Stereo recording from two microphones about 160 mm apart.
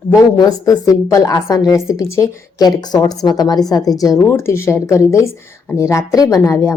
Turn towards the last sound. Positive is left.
turn(degrees=20)  # may be behind; listen again after turning